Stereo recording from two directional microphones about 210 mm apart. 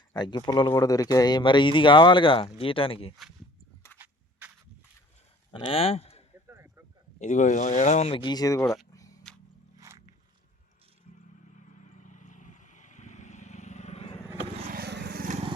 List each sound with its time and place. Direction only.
0.1 s speech: 20° left (ahead or behind)
3.9 s a sound: 10° right (ahead or behind)
5.5 s speech: 25° left (ahead or behind)
6.5 s a sound: 10° right (ahead or behind)
7.2 s speech: 35° left (ahead or behind); by 8.6 s 15° left (ahead or behind)
8.6 s speech: centre (ahead or behind)
9.7 s music: 15° right (ahead or behind)
11.4 s vehicle: 35° left (ahead or behind)
14.7 s vehicle: 50° right (ahead or behind)